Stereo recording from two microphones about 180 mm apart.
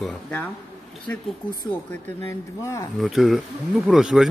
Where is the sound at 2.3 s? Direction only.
15° left (ahead or behind).